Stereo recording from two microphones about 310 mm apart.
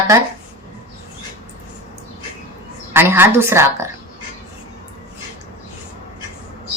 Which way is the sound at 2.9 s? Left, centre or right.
Centre.